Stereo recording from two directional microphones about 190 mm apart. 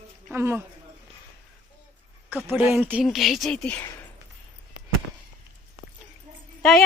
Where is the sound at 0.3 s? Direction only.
15° right (ahead or behind).